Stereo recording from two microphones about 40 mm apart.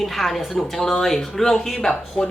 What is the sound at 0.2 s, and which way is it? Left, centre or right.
Speech, centre.